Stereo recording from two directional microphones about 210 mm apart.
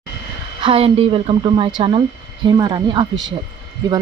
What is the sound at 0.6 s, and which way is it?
Speech, 25° right (ahead or behind).